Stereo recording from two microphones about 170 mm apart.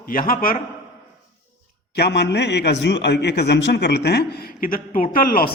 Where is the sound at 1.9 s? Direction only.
75° left (ahead or behind); by 5.5 s 60° left (ahead or behind).